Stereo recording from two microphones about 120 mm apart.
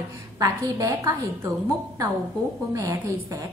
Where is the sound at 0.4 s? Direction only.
25° right (ahead or behind).